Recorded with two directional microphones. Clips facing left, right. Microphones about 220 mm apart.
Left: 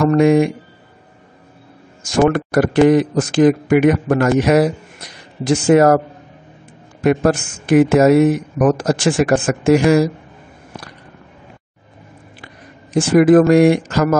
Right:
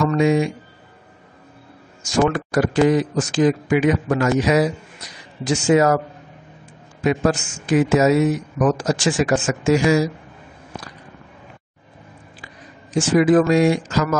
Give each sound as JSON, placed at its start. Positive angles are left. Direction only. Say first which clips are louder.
{"t": 0.0, "sound": "a man's voice", "louder": "left 5 dB", "side_deg": 55}
{"t": 2.1, "sound": "a man's voice", "louder": "left 4 dB", "side_deg": 60}
{"t": 7.0, "sound": "a man's voice", "louder": "left 4 dB", "side_deg": 60}
{"t": 12.9, "sound": "a man's voice", "louder": "left 5 dB", "side_deg": 55}